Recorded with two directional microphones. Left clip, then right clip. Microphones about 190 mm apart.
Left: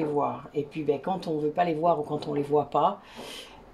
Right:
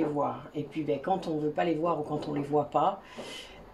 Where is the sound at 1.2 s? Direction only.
45° left (ahead or behind).